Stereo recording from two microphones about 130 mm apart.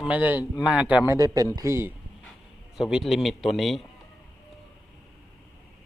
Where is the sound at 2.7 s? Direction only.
5° right (ahead or behind).